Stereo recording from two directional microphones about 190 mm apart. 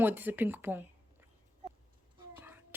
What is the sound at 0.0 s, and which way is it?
Speech, 10° right (ahead or behind).